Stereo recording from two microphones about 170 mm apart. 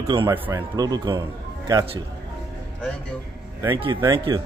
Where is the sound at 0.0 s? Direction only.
25° right (ahead or behind).